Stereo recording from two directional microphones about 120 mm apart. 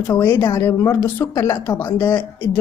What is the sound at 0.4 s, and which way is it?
Speech, 20° left (ahead or behind).